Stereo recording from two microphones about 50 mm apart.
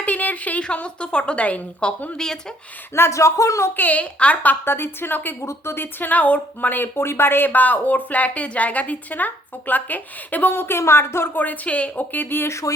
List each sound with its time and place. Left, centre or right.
0.0 s a sound: left
0.6 s a woman's voice: left
2.1 s speech: centre
2.9 s speech: left
3.8 s speech: left
4.6 s speech: left
5.5 s speech: left
10.5 s speech: left
11.3 s a woman's voice: left
12.1 s speech: left
12.5 s speech: left